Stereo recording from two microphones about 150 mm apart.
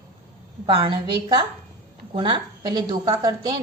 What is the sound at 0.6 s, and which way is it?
A woman's voice, 35° right (ahead or behind).